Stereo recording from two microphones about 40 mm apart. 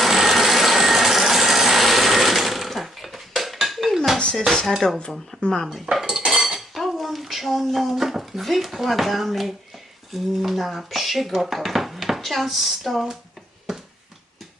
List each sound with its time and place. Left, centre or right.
0.0 s a sound: centre
4.8 s speech: centre
5.3 s a sound: left
5.6 s dishes: centre
6.1 s cutlery: centre
10.1 s speech: centre